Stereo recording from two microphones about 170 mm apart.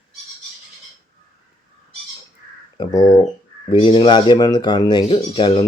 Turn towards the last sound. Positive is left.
turn(degrees=30)  # may be behind; listen again after turning